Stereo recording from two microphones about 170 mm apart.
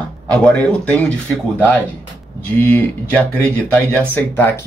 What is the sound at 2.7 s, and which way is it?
Speech, 10° left (ahead or behind).